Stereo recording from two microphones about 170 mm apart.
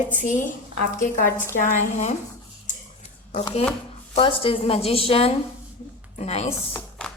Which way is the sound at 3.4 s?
35° left (ahead or behind).